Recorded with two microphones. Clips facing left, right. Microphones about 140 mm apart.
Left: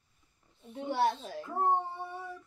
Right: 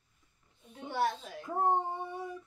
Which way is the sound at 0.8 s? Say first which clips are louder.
Left 3 dB; 25° left (ahead or behind).